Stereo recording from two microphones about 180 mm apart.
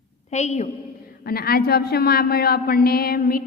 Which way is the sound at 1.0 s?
55° left (ahead or behind).